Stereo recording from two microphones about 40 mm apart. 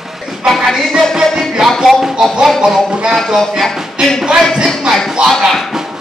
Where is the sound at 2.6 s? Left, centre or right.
Centre.